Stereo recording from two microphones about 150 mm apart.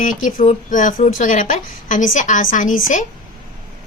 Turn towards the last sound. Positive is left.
turn(degrees=60)  # may be behind; listen again after turning